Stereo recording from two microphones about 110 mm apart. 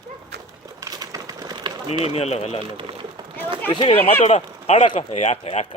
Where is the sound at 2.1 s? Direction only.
70° left (ahead or behind).